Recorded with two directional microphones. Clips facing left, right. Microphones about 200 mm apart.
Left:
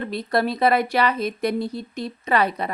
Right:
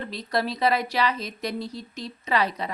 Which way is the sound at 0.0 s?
55° left (ahead or behind).